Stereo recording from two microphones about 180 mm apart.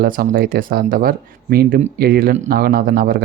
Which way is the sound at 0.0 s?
55° right (ahead or behind).